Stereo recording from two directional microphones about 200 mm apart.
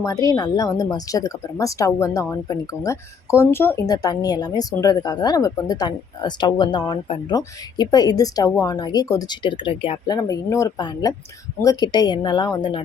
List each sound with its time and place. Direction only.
0.0 s speech: 15° left (ahead or behind)
10.2 s speech: 15° left (ahead or behind)